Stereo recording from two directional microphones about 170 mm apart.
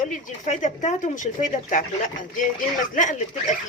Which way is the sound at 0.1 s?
45° left (ahead or behind).